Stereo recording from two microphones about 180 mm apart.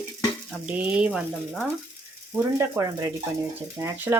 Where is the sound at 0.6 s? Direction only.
5° right (ahead or behind).